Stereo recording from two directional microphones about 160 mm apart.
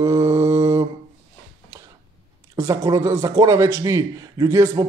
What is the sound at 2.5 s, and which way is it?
A man's voice, 20° right (ahead or behind).